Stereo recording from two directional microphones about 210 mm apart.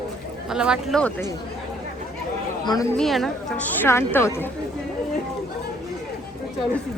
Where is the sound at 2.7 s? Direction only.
15° left (ahead or behind).